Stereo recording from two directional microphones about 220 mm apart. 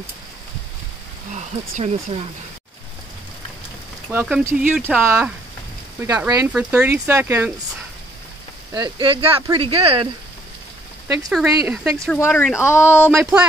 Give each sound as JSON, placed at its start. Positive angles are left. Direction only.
{"t": 1.3, "sound": "speech", "side_deg": -30}
{"t": 4.1, "sound": "speech", "side_deg": -10}
{"t": 6.2, "sound": "speech", "side_deg": -5}
{"t": 8.7, "sound": "speech", "side_deg": -20}
{"t": 11.2, "sound": "speech", "side_deg": 0}
{"t": 12.1, "sound": "speech", "side_deg": 10}
{"t": 13.2, "sound": "speech", "side_deg": -5}